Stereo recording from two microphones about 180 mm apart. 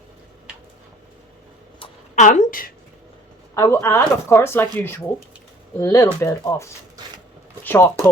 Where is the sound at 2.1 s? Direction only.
45° left (ahead or behind).